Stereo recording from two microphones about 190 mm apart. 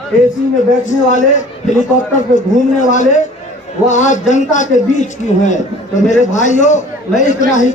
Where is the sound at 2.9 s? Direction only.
40° left (ahead or behind).